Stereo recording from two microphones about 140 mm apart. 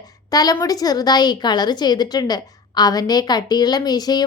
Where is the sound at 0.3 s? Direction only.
25° left (ahead or behind).